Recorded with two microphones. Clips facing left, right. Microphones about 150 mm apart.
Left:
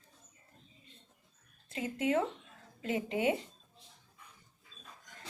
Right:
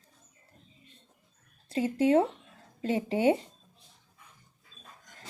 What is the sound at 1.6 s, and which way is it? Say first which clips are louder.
A woman's voice: right 8 dB; 30° right (ahead or behind).